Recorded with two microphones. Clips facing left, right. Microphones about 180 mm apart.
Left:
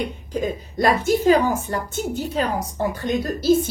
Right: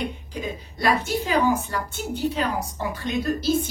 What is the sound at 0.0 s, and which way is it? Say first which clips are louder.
A woman's voice: left 5 dB; 45° left (ahead or behind).